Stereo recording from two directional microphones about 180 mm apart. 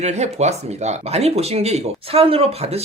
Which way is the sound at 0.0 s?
40° right (ahead or behind).